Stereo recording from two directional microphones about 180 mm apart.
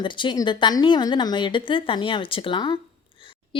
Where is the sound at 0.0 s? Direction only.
25° left (ahead or behind).